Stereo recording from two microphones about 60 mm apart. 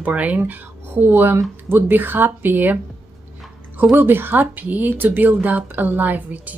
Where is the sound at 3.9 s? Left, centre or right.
Right.